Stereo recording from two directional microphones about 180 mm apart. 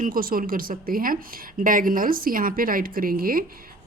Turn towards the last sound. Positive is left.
turn(degrees=-50)  # may be behind; listen again after turning